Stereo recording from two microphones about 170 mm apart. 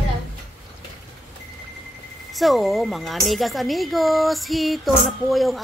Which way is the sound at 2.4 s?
Centre (ahead or behind).